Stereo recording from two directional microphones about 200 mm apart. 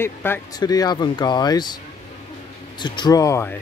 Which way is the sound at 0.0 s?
10° left (ahead or behind).